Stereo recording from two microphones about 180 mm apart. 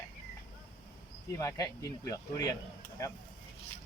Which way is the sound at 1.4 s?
15° left (ahead or behind).